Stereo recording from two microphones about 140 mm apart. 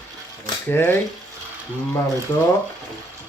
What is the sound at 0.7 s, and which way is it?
Speech, 15° left (ahead or behind).